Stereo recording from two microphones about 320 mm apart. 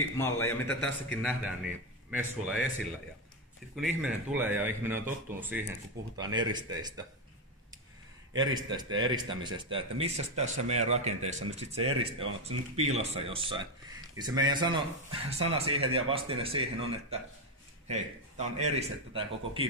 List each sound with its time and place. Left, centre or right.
0.2 s a man's voice: centre
3.7 s a man's voice: centre
8.3 s a man's voice: centre
17.8 s speech: right